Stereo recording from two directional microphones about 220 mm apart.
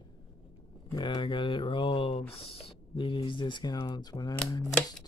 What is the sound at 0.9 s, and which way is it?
Speech, 20° left (ahead or behind).